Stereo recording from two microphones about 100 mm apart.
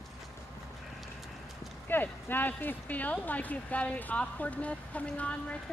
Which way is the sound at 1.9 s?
20° left (ahead or behind).